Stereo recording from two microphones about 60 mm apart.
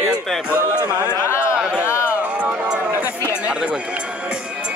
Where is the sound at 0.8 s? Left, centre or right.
Right.